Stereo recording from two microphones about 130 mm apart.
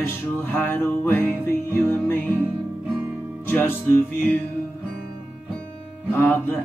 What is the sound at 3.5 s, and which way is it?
Music, 15° left (ahead or behind).